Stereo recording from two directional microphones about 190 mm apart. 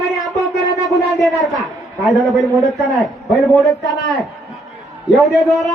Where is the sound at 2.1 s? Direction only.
Centre (ahead or behind).